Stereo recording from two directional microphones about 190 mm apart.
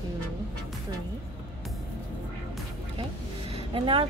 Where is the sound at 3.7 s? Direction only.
25° right (ahead or behind).